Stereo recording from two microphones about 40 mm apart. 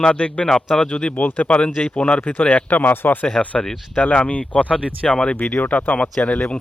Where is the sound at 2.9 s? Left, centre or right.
Left.